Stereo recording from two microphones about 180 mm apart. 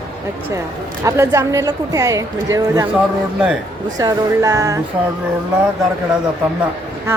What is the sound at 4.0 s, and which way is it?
Music, 20° right (ahead or behind).